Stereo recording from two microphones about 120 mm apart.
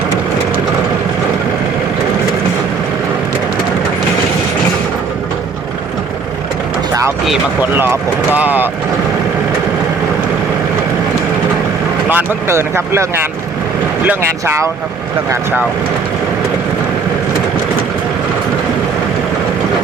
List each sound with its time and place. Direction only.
7.6 s speech: 15° right (ahead or behind)
12.0 s speech: 15° right (ahead or behind)